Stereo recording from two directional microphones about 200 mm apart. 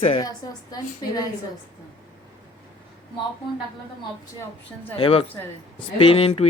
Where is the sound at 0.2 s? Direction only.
20° left (ahead or behind).